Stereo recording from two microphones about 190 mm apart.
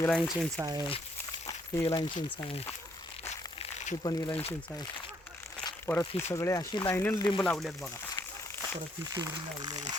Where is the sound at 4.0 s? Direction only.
20° left (ahead or behind).